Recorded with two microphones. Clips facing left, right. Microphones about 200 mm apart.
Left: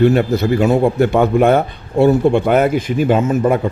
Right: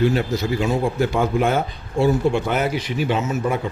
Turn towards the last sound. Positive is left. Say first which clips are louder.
# left 8 dB
turn(degrees=55)  # may be behind; listen again after turning